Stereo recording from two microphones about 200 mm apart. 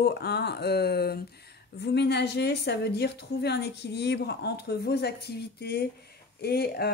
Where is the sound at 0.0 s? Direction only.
55° left (ahead or behind).